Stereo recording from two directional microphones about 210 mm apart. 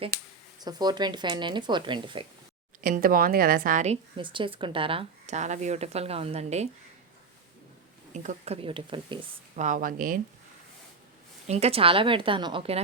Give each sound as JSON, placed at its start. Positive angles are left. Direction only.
{"t": 0.6, "sound": "speech", "side_deg": -20}
{"t": 2.8, "sound": "a woman's voice", "side_deg": -40}
{"t": 4.2, "sound": "speech", "side_deg": -25}
{"t": 8.1, "sound": "speech", "side_deg": -35}
{"t": 9.6, "sound": "a woman's voice", "side_deg": -35}
{"t": 11.4, "sound": "speech", "side_deg": -30}